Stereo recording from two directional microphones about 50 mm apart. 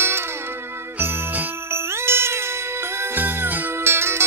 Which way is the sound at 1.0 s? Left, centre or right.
Right.